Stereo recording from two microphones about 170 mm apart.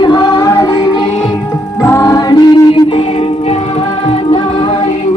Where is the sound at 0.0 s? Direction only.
25° left (ahead or behind).